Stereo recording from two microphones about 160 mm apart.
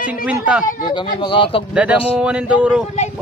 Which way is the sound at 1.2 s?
30° left (ahead or behind).